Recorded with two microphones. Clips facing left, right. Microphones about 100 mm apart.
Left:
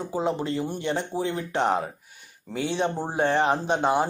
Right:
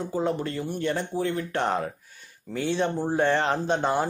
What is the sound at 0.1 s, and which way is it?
Speech, 20° left (ahead or behind).